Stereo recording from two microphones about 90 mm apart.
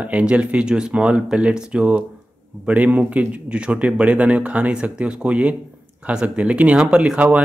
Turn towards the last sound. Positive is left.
turn(degrees=-15)  # may be behind; listen again after turning